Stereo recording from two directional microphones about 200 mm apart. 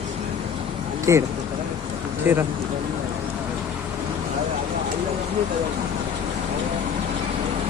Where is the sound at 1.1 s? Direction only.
15° right (ahead or behind).